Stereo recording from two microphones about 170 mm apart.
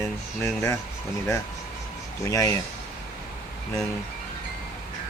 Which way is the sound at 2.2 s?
20° left (ahead or behind).